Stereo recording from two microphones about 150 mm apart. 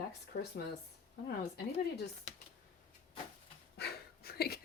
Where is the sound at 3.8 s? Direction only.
90° left.